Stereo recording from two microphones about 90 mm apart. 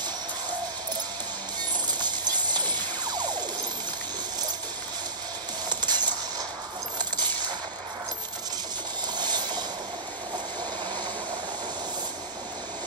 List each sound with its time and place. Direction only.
1.9 s music: 55° right (ahead or behind)
5.7 s a sound: 55° right (ahead or behind)
9.1 s train: 55° right (ahead or behind)